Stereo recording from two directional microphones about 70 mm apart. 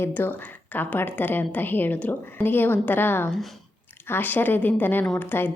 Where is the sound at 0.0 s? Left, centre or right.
Left.